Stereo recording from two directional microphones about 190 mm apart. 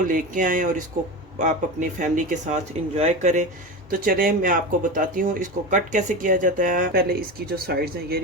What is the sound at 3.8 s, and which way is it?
Speech, 50° right (ahead or behind).